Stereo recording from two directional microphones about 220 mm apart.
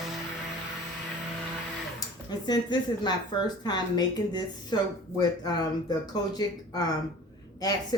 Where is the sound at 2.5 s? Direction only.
20° left (ahead or behind).